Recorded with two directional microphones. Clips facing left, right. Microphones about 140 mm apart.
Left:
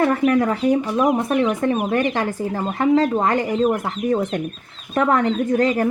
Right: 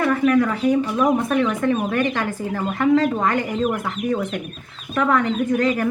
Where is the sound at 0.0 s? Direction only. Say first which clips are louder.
Left 1 dB; 35° left (ahead or behind).